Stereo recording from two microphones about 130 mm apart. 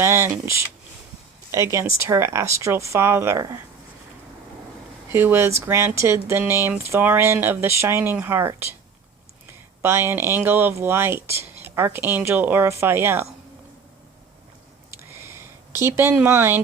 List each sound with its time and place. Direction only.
0.0 s speech: 20° right (ahead or behind)
5.1 s speech: 20° right (ahead or behind)
9.8 s speech: 20° right (ahead or behind)
15.2 s a sound: 20° right (ahead or behind)